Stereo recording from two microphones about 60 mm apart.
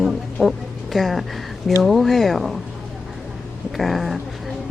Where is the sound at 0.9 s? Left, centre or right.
Centre.